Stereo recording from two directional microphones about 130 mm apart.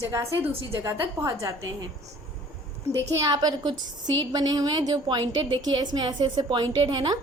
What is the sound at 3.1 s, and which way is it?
A woman's voice, 30° right (ahead or behind).